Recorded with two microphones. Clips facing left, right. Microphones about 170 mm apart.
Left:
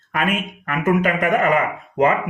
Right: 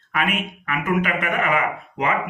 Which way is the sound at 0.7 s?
40° left (ahead or behind).